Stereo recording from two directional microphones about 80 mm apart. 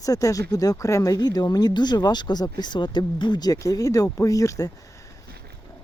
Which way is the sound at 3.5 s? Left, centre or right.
Left.